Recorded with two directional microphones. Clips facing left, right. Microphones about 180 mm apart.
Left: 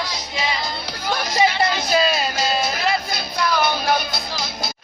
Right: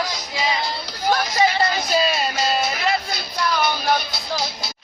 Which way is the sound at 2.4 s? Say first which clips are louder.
Even; 40° left (ahead or behind).